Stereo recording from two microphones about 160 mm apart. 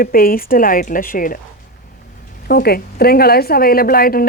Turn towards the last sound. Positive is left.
turn(degrees=65)  # may be behind; listen again after turning